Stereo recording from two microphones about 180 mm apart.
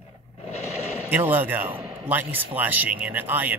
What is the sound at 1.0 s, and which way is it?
Speech, 10° right (ahead or behind).